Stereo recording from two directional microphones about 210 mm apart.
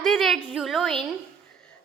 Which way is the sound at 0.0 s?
Centre (ahead or behind).